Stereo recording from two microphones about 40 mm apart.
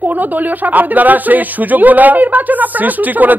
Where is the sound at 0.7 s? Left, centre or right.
Right.